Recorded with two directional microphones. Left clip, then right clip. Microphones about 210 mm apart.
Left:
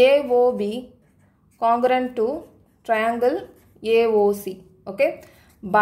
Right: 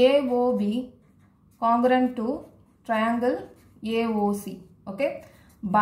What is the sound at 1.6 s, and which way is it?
A woman's voice, 50° left (ahead or behind).